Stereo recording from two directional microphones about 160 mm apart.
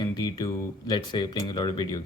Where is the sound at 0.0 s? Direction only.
25° left (ahead or behind).